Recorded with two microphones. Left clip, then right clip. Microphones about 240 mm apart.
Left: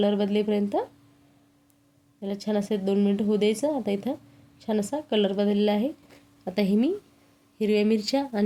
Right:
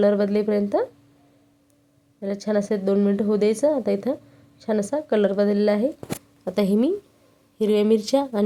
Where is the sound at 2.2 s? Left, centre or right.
Centre.